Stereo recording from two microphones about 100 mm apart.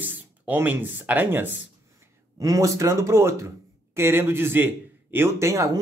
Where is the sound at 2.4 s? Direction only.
35° right (ahead or behind).